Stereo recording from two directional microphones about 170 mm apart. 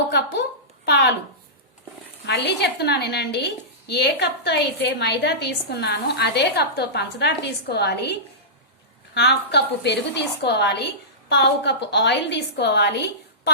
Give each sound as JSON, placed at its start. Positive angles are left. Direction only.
{"t": 0.9, "sound": "a woman's voice", "side_deg": 70}
{"t": 2.2, "sound": "a woman's voice", "side_deg": 80}
{"t": 9.1, "sound": "a woman's voice", "side_deg": 80}